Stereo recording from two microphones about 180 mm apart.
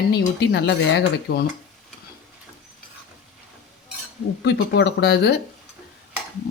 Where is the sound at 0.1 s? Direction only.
65° left (ahead or behind).